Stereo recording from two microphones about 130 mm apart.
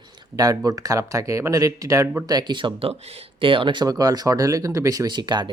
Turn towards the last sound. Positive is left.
turn(degrees=-35)  # may be behind; listen again after turning